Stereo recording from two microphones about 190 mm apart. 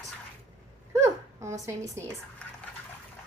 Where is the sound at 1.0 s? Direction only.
15° right (ahead or behind).